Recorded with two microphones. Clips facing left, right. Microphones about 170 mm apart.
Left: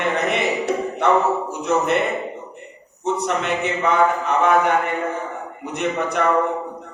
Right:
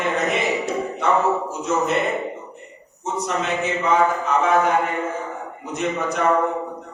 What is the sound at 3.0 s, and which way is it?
A man's voice, 65° left (ahead or behind).